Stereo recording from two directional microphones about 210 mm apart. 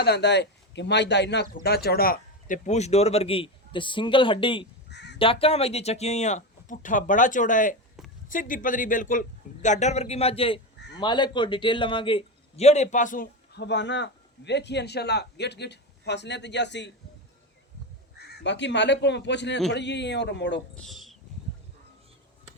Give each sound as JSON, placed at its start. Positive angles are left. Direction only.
{"t": 0.0, "sound": "speech", "side_deg": 50}
{"t": 4.9, "sound": "crow", "side_deg": 55}
{"t": 5.2, "sound": "speech", "side_deg": 25}
{"t": 10.8, "sound": "a sound", "side_deg": 55}
{"t": 11.0, "sound": "a man's voice", "side_deg": 20}
{"t": 18.2, "sound": "speech", "side_deg": 55}
{"t": 20.7, "sound": "a sound", "side_deg": 0}